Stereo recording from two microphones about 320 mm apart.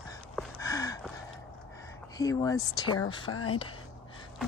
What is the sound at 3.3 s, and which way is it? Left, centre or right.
Speech, left.